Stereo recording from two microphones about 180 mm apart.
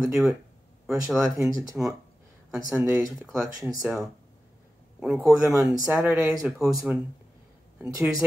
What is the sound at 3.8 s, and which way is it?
Speech, centre (ahead or behind).